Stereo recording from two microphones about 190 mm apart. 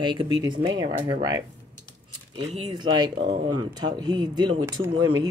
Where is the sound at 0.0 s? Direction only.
25° right (ahead or behind).